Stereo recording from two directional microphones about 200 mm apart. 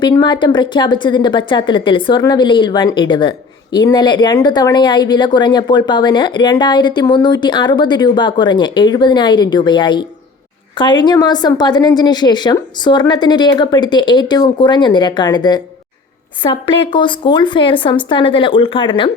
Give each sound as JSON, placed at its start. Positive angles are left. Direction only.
{"t": 0.0, "sound": "speech", "side_deg": 20}